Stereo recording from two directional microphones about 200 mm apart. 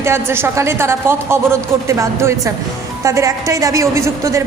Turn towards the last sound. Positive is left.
turn(degrees=-15)  # may be behind; listen again after turning